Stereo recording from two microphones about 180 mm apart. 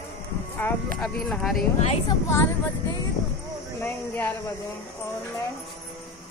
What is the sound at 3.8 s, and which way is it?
Speech, 10° left (ahead or behind).